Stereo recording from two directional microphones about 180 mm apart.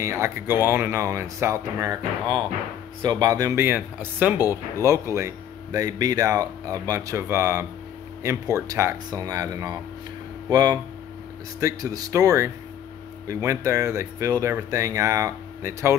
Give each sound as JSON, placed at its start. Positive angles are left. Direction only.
{"t": 0.0, "sound": "speech", "side_deg": -15}
{"t": 3.0, "sound": "speech", "side_deg": -20}
{"t": 4.4, "sound": "speech", "side_deg": 20}
{"t": 4.8, "sound": "speech", "side_deg": -15}